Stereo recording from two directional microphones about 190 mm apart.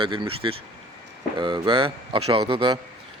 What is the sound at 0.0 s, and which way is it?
Speech, 25° right (ahead or behind).